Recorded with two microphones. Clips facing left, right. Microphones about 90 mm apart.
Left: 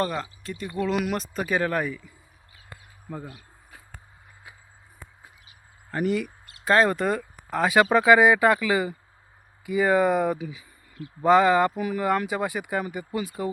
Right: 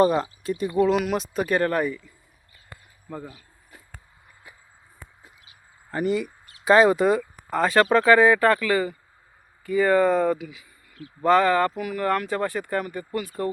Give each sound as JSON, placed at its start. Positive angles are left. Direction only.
{"t": 0.0, "sound": "speech", "side_deg": -15}
{"t": 0.9, "sound": "speech", "side_deg": 0}
{"t": 3.1, "sound": "speech", "side_deg": 5}
{"t": 5.9, "sound": "speech", "side_deg": 0}